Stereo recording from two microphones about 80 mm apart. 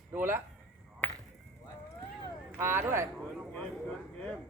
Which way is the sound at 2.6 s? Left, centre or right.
Right.